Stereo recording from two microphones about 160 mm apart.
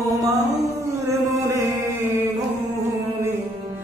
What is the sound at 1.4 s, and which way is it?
Chant, 20° right (ahead or behind).